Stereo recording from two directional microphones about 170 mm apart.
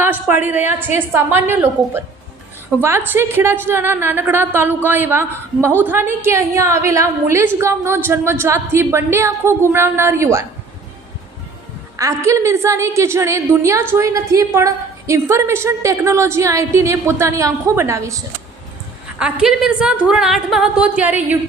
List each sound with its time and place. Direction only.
0.0 s a woman's voice: 10° right (ahead or behind)
11.9 s a woman's voice: 20° right (ahead or behind)
19.2 s a woman's voice: 5° right (ahead or behind)